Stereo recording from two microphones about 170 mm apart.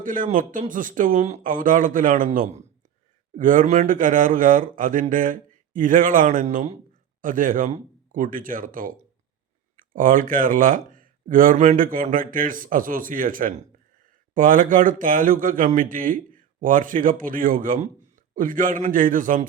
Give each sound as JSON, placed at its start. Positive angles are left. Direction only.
{"t": 0.0, "sound": "speech", "side_deg": -50}